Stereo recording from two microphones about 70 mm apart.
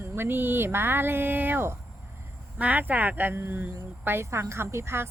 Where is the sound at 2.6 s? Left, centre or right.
Right.